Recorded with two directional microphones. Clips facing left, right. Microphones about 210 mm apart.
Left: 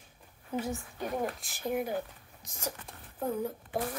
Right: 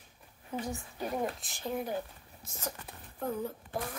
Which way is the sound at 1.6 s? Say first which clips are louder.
Left 3 dB; 10° left (ahead or behind).